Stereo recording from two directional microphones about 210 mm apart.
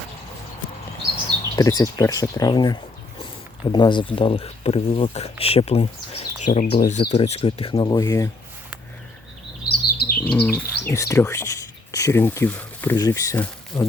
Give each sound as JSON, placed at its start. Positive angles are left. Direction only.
{"t": 1.5, "sound": "speech", "side_deg": 15}
{"t": 9.6, "sound": "chirp", "side_deg": 45}
{"t": 10.2, "sound": "bird", "side_deg": 5}
{"t": 10.5, "sound": "speech", "side_deg": 15}